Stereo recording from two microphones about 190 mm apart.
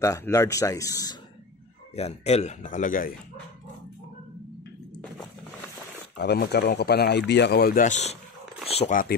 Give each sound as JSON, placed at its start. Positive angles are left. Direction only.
{"t": 0.0, "sound": "speech", "side_deg": 15}
{"t": 2.0, "sound": "speech", "side_deg": 35}
{"t": 6.1, "sound": "speech", "side_deg": 60}